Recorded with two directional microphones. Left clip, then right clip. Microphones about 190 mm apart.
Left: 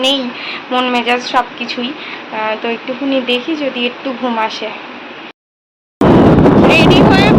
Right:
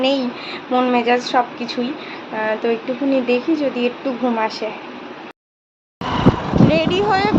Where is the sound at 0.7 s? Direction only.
5° right (ahead or behind).